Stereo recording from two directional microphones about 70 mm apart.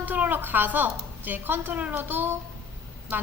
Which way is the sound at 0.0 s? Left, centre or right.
Right.